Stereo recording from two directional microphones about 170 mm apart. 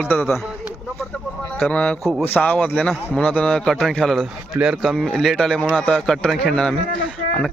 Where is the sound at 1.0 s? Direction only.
15° left (ahead or behind).